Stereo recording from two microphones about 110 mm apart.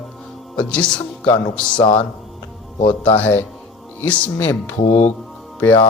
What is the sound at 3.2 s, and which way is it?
A man's voice, 20° left (ahead or behind).